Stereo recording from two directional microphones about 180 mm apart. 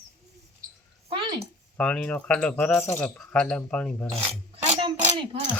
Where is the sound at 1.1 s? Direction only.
25° right (ahead or behind).